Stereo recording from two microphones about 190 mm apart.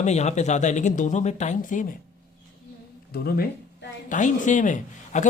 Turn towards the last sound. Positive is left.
turn(degrees=40)  # may be behind; listen again after turning